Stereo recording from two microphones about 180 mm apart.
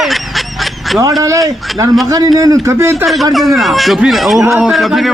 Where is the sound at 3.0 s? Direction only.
Centre (ahead or behind).